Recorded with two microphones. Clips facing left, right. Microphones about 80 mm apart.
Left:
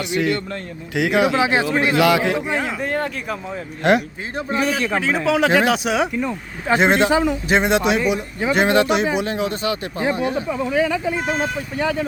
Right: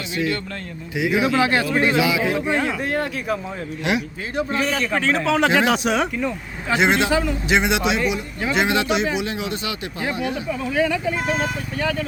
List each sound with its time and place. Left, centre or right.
0.1 s speech: left
1.3 s speech: centre
1.7 s speech: centre
2.0 s speech: left
2.3 s speech: centre
3.9 s speech: left
4.7 s speech: centre
6.7 s speech: left
7.1 s speech: centre
7.4 s speech: left
10.0 s speech: left
10.7 s speech: centre